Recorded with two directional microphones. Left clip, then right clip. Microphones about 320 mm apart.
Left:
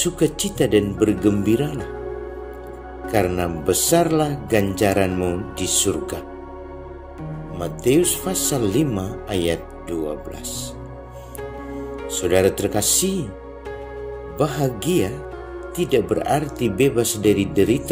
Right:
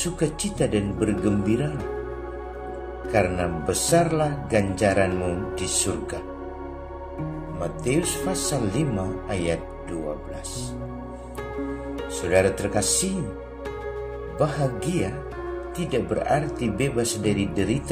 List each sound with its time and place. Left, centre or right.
0.0 s speech: left
3.1 s speech: left
7.8 s speech: left
12.2 s speech: left
14.4 s speech: left